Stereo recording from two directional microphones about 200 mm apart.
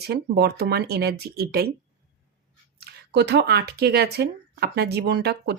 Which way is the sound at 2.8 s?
55° right (ahead or behind).